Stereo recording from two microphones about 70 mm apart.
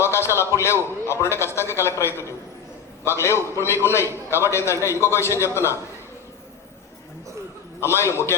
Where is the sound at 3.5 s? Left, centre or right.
Left.